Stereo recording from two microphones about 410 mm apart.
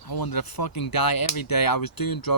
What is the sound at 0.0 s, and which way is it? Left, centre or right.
Speech, left.